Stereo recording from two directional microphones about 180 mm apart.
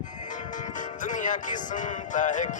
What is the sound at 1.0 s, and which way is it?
Music, 45° left (ahead or behind).